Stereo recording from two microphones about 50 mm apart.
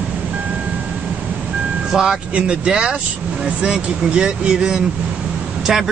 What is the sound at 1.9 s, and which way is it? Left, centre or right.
Speech, centre.